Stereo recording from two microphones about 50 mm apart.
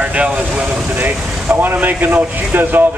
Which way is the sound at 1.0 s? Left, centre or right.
Right.